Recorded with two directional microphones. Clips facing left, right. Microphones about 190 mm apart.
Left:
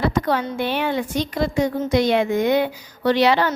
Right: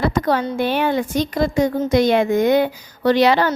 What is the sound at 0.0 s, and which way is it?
A woman's voice, 45° right (ahead or behind).